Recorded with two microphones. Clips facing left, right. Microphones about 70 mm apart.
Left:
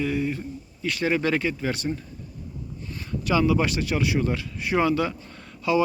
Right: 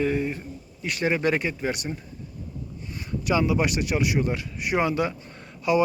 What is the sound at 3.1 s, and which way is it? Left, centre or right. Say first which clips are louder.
A man's voice: left 1 dB; right.